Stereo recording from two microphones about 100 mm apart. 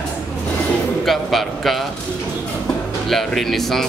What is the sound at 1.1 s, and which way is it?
Speech, centre (ahead or behind).